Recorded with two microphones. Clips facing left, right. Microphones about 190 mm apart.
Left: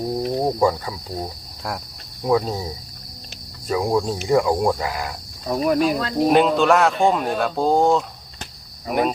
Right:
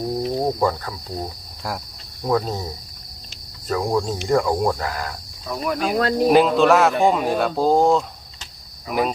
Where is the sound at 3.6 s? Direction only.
10° left (ahead or behind).